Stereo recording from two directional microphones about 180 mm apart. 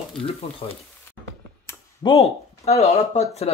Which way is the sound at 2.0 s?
30° left (ahead or behind).